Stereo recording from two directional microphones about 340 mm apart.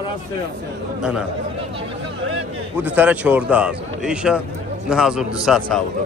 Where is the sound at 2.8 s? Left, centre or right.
Centre.